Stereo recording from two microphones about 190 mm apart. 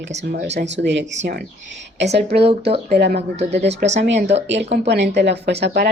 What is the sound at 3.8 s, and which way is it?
Speech, 60° right (ahead or behind).